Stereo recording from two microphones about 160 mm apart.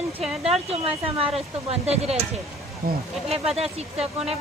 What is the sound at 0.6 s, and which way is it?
Speech, 40° right (ahead or behind).